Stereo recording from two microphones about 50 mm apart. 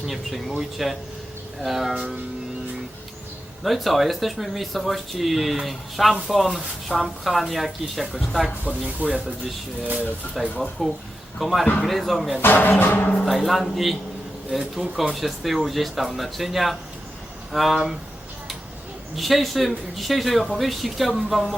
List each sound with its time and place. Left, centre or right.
0.1 s speech: centre
3.6 s speech: centre
9.0 s speech: right
10.6 s speech: centre
12.4 s speech: left
13.2 s speech: centre
14.8 s speech: centre
15.1 s speech: centre
19.1 s speech: centre